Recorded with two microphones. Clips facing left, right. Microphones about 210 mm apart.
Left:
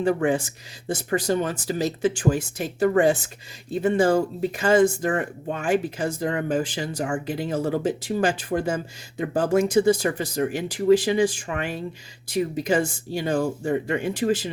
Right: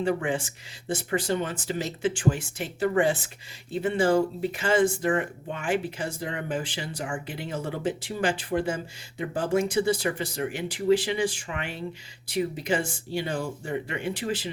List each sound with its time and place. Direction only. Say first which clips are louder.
0.0 s speech: left 5 dB; 40° left (ahead or behind)